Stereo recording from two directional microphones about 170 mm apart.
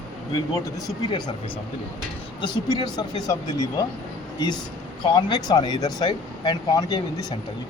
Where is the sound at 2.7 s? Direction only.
20° left (ahead or behind).